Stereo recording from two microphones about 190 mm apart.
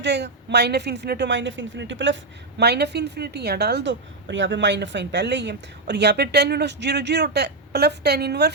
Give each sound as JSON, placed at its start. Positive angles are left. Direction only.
{"t": 0.0, "sound": "a woman's voice", "side_deg": -65}
{"t": 2.6, "sound": "a woman's voice", "side_deg": -60}